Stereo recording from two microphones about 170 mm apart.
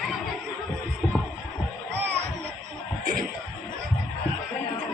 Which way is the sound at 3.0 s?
50° right (ahead or behind).